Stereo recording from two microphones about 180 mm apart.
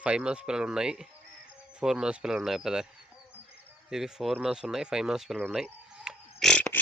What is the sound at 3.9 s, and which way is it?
Speech, centre (ahead or behind).